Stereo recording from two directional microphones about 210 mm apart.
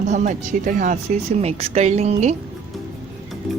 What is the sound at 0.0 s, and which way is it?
Speech, 35° right (ahead or behind).